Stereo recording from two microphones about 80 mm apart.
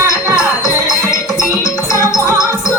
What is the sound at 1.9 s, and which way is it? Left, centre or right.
Music, left.